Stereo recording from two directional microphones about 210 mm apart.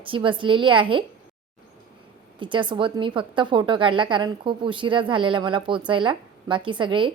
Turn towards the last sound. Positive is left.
turn(degrees=-25)  # may be behind; listen again after turning